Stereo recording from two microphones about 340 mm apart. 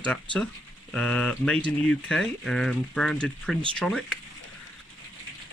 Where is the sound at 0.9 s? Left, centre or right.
Centre.